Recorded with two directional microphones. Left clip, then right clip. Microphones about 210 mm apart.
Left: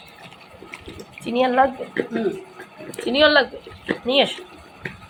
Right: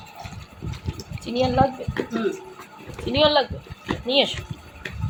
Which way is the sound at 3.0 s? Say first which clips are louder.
Left 3 dB; 10° left (ahead or behind).